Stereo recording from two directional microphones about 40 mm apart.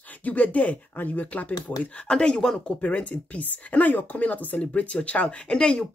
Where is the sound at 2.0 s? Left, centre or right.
Left.